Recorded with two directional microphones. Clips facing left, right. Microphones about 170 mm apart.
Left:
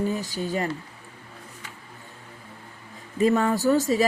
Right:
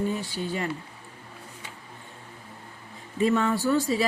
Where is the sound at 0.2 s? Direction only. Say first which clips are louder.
Left 3 dB; 40° left (ahead or behind).